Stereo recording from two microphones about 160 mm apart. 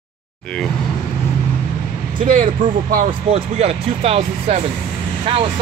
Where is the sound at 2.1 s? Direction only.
55° right (ahead or behind).